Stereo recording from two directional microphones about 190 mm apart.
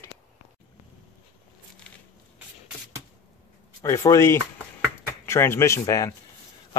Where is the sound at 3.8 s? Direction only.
15° left (ahead or behind).